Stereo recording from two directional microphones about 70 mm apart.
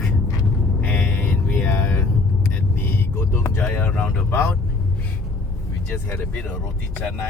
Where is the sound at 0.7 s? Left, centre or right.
Centre.